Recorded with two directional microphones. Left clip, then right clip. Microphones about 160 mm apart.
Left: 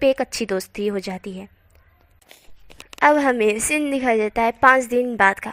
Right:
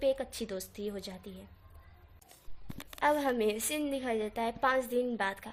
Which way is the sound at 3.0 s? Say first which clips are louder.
Left 13 dB; 30° left (ahead or behind).